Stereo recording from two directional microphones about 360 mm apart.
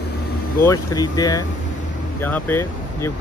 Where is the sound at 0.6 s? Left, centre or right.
Centre.